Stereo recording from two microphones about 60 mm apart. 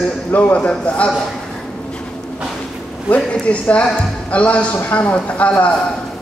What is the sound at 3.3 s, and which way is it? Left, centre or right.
Speech, left.